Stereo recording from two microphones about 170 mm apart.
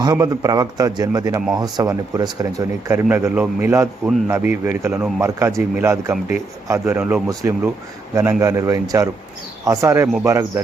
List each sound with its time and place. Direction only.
0.0 s speech: 20° right (ahead or behind)